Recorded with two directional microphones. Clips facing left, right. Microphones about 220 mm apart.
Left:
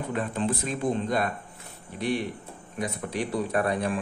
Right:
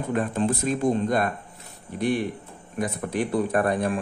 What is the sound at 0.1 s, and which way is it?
Speech, 45° right (ahead or behind).